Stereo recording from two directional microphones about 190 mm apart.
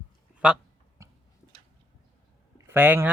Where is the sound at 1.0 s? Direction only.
15° right (ahead or behind).